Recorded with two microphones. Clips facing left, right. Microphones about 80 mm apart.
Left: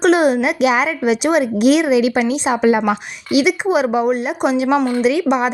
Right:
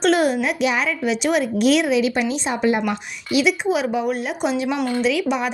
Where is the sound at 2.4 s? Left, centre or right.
Left.